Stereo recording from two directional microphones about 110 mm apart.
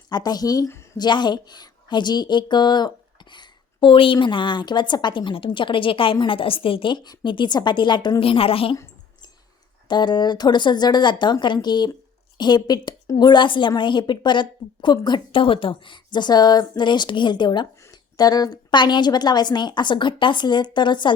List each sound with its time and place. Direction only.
0.1 s speech: 40° left (ahead or behind); by 8.7 s 60° left (ahead or behind)
8.7 s a sound: 30° left (ahead or behind)
9.9 s speech: 45° left (ahead or behind)